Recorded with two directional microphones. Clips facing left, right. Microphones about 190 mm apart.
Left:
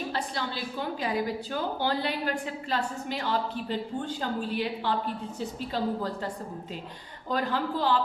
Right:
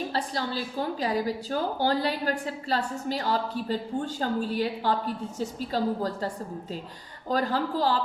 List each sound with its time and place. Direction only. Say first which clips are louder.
0.1 s a woman's voice: right 3 dB; 40° right (ahead or behind)
7.3 s a woman's voice: right 2 dB; 40° right (ahead or behind)